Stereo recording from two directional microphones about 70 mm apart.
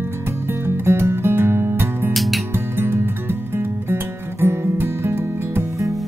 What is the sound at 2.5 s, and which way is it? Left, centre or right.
Music, right.